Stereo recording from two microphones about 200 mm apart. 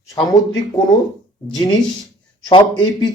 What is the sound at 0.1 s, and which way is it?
Speech, 20° left (ahead or behind).